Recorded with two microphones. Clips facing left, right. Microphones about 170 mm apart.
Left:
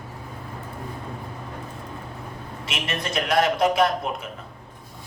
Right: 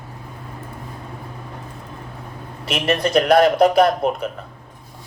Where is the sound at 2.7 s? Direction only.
35° right (ahead or behind).